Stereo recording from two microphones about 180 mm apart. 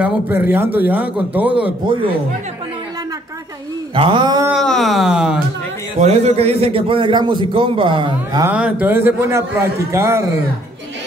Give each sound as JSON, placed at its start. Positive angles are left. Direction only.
{"t": 0.0, "sound": "a man's voice", "side_deg": -10}
{"t": 1.9, "sound": "a man's voice", "side_deg": -30}
{"t": 3.9, "sound": "a man's voice", "side_deg": -25}
{"t": 4.5, "sound": "speech", "side_deg": 0}
{"t": 5.9, "sound": "a man's voice", "side_deg": -35}
{"t": 8.5, "sound": "a man's voice", "side_deg": -5}